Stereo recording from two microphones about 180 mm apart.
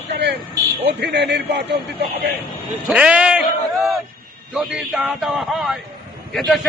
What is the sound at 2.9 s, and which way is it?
Speech, 5° right (ahead or behind).